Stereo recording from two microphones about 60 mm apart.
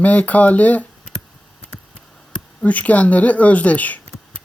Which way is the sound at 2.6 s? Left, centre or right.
Left.